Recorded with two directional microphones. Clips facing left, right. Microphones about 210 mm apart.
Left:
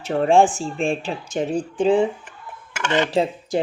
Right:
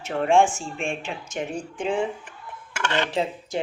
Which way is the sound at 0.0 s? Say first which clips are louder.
Left 4 dB; 35° left (ahead or behind).